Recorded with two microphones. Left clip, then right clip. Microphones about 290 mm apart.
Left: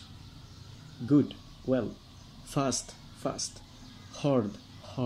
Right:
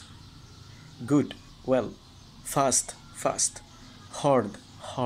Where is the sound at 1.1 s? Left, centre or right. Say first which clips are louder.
Right 1 dB; right.